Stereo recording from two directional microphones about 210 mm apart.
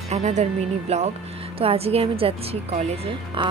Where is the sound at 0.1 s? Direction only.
35° right (ahead or behind).